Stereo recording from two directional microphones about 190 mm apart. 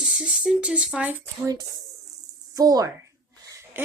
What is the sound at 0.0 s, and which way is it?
Speech, centre (ahead or behind).